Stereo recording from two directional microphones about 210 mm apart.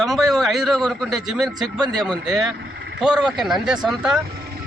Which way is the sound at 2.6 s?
55° right (ahead or behind).